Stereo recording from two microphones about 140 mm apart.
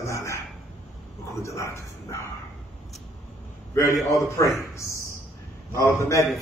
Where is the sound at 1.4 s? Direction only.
20° left (ahead or behind).